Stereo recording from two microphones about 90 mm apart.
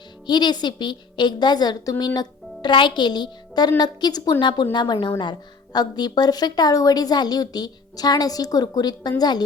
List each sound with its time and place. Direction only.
0.3 s a woman's voice: 55° left (ahead or behind)